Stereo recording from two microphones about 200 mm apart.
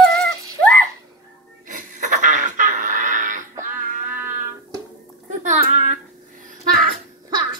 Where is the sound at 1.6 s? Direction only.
40° right (ahead or behind).